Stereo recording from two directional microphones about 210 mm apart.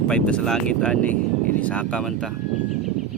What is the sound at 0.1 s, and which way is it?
Speech, 5° left (ahead or behind).